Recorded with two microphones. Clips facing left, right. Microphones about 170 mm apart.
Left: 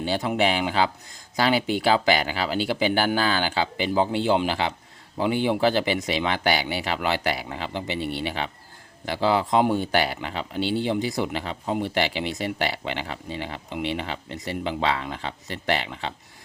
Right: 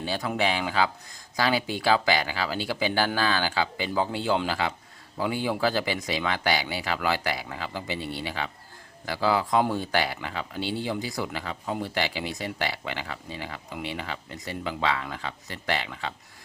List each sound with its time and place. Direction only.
0.0 s speech: 25° left (ahead or behind)